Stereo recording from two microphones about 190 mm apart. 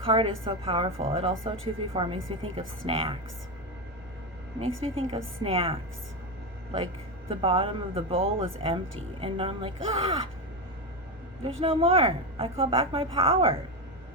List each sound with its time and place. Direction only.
0.0 s a woman's voice: 30° right (ahead or behind)
4.8 s a woman's voice: 30° right (ahead or behind)
7.3 s a woman's voice: 30° right (ahead or behind)
11.6 s a woman's voice: 30° right (ahead or behind)